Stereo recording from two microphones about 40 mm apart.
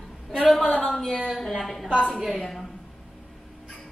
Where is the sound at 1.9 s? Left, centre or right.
Left.